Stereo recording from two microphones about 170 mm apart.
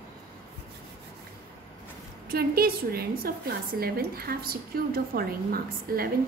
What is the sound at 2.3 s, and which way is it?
A woman's voice, 60° right (ahead or behind).